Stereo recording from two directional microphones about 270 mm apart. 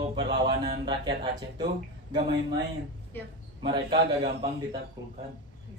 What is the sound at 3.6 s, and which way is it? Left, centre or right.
Speech, centre.